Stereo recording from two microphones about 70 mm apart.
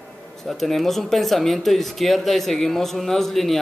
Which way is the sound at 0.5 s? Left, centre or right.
Centre.